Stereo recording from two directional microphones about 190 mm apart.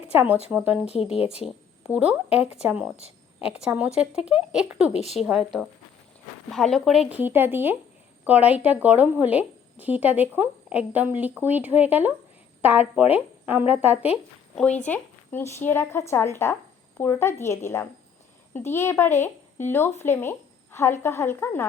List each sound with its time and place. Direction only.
0.1 s a woman's voice: 10° right (ahead or behind)
4.9 s a woman's voice: 35° left (ahead or behind)
5.1 s a woman's voice: 5° right (ahead or behind)
6.5 s speech: centre (ahead or behind)
14.5 s speech: 5° left (ahead or behind)